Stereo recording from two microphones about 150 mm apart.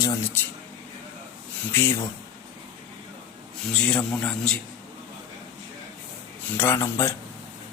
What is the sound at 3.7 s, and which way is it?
Speech, 5° left (ahead or behind).